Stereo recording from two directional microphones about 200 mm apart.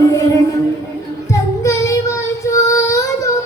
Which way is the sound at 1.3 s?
15° left (ahead or behind).